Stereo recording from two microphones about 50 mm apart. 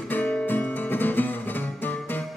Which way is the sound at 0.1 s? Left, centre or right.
Left.